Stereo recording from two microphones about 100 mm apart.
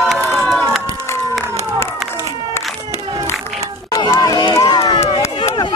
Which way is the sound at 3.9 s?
45° left (ahead or behind).